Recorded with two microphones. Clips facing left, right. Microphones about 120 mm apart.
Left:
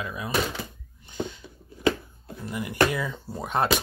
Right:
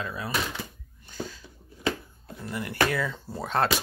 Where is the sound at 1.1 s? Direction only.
20° left (ahead or behind).